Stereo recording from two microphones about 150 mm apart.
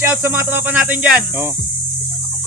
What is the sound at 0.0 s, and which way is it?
Speech, 15° right (ahead or behind).